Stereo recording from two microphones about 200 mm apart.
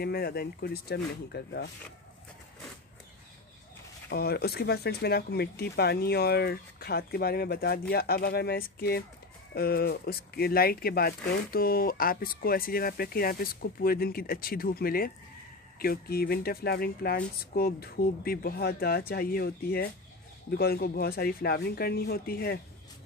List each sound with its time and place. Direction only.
0.0 s speech: 50° left (ahead or behind)
4.1 s speech: 50° left (ahead or behind)